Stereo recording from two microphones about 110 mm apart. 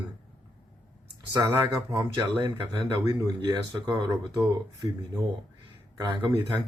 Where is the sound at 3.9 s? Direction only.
30° right (ahead or behind).